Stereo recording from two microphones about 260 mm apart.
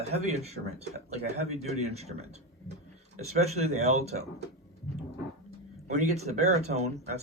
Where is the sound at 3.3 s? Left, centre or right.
Right.